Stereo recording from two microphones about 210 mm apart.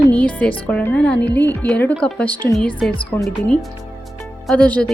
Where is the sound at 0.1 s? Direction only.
5° left (ahead or behind).